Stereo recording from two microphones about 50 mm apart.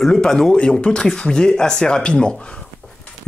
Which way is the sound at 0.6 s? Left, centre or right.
Left.